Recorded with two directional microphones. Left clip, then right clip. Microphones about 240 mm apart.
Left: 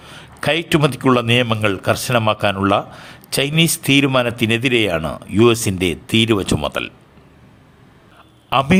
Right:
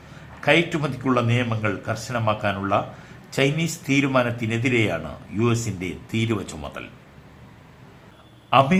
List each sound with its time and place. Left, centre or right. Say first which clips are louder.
0.3 s a man's voice: left 2 dB; left
8.4 s a man's voice: left 2 dB; left